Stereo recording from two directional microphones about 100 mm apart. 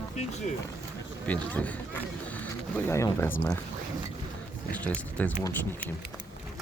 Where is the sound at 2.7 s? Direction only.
25° left (ahead or behind).